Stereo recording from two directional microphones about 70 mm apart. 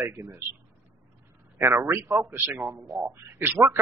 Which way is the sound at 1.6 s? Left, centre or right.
Right.